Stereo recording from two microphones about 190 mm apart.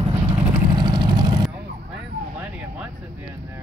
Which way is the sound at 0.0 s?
25° right (ahead or behind).